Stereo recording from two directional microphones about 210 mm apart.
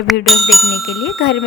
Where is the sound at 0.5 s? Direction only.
Centre (ahead or behind).